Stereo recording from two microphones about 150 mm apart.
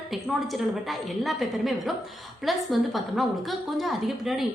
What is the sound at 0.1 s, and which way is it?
A woman's voice, centre (ahead or behind).